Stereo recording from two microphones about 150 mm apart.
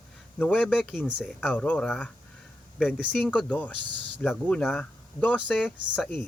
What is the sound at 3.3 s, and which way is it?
Speech, 10° left (ahead or behind).